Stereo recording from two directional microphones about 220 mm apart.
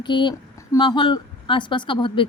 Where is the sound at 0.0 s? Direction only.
20° left (ahead or behind).